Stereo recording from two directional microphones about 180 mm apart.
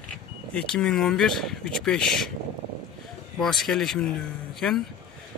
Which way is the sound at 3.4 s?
Centre (ahead or behind).